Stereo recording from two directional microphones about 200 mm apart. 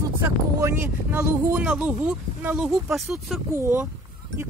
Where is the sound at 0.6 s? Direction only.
10° right (ahead or behind).